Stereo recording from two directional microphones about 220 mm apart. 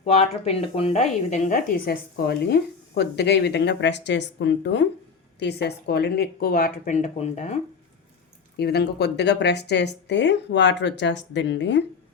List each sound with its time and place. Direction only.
0.0 s speech: 30° left (ahead or behind)
8.5 s speech: 45° left (ahead or behind)